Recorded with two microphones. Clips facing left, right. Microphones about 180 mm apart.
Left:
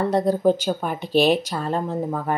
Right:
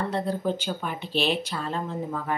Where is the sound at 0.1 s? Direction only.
40° left (ahead or behind).